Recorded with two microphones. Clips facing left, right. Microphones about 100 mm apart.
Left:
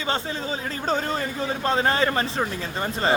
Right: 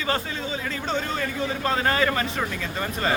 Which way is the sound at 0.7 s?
40° left (ahead or behind).